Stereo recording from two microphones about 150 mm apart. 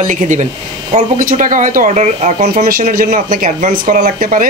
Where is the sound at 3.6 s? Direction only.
50° right (ahead or behind).